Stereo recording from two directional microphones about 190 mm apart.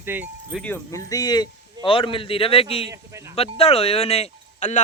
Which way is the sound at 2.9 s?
15° right (ahead or behind).